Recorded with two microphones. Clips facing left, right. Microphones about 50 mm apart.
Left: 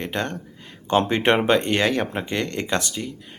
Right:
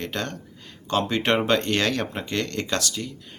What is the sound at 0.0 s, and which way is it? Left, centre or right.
Speech, left.